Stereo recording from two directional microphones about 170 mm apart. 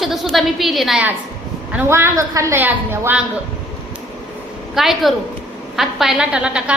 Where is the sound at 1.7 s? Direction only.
15° right (ahead or behind).